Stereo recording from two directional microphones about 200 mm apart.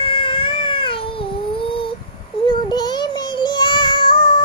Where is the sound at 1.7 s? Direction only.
25° left (ahead or behind).